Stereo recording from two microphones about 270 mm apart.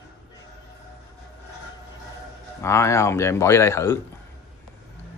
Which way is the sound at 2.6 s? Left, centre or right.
Centre.